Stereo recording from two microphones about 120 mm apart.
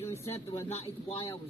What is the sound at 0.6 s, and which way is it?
Speech, 60° left (ahead or behind).